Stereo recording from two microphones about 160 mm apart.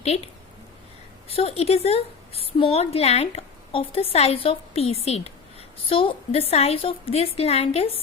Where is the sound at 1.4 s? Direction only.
40° left (ahead or behind).